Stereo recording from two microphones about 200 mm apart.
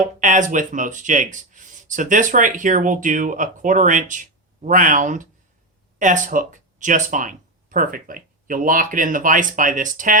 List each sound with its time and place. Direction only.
0.0 s speech: 40° right (ahead or behind)